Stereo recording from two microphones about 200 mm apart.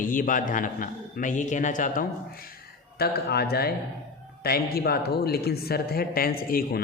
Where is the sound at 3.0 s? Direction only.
50° left (ahead or behind).